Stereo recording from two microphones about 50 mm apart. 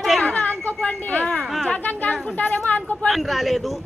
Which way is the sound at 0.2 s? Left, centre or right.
Left.